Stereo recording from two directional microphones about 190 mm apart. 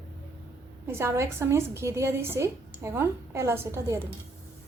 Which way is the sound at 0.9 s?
15° right (ahead or behind).